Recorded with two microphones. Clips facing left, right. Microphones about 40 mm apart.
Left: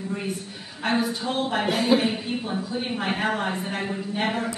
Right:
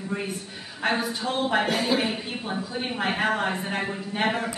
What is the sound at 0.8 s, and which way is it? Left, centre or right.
A woman's voice, centre.